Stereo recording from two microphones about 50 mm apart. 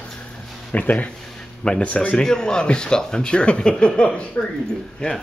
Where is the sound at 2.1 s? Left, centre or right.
Centre.